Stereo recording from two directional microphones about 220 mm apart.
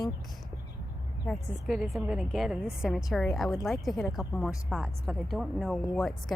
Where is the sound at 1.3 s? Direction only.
Centre (ahead or behind).